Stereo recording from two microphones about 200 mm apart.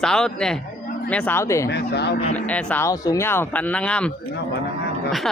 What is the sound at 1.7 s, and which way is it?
Speech, 55° left (ahead or behind).